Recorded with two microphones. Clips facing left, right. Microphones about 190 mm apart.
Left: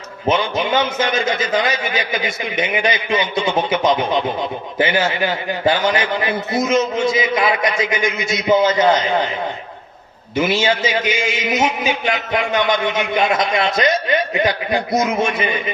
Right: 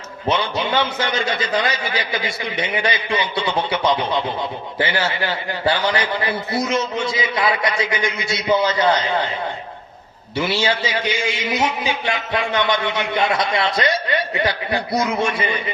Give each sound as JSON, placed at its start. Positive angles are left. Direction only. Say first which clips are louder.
{"t": 0.3, "sound": "a man's voice", "louder": "left 3 dB", "side_deg": 20}
{"t": 10.3, "sound": "a man's voice", "louder": "left 3 dB", "side_deg": 20}